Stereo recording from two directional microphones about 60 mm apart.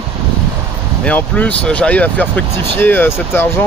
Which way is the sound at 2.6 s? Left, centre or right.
Left.